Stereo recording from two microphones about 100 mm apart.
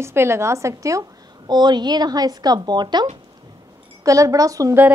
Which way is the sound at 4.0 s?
35° right (ahead or behind).